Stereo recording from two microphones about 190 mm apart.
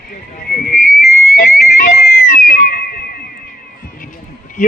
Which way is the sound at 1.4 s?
40° left (ahead or behind).